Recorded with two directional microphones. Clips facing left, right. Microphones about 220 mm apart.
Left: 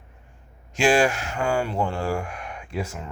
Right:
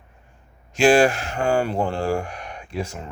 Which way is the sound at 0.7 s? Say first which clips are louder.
Right 4 dB; 35° right (ahead or behind).